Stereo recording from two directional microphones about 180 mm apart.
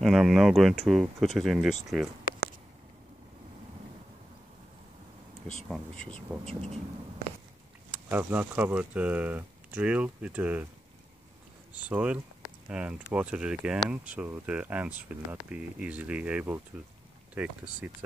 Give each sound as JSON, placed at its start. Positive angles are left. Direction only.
{"t": 0.0, "sound": "speech", "side_deg": 0}
{"t": 1.9, "sound": "a sound", "side_deg": 0}
{"t": 5.5, "sound": "speech", "side_deg": 5}
{"t": 6.4, "sound": "speech", "side_deg": -35}
{"t": 8.1, "sound": "speech", "side_deg": -10}
{"t": 11.9, "sound": "speech", "side_deg": -5}